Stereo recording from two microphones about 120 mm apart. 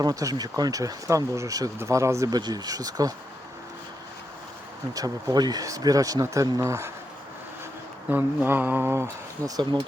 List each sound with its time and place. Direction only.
0.0 s speech: 30° right (ahead or behind)
4.9 s speech: 30° right (ahead or behind)
8.1 s speech: 15° right (ahead or behind)